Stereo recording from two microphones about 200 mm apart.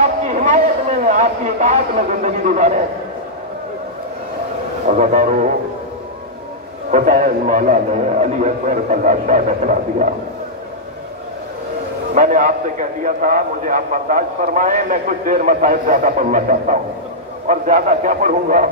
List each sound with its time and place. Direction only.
0.0 s a man's voice: 35° right (ahead or behind)
4.8 s a man's voice: 40° right (ahead or behind)
6.9 s a man's voice: 40° right (ahead or behind)
12.1 s a man's voice: 40° right (ahead or behind)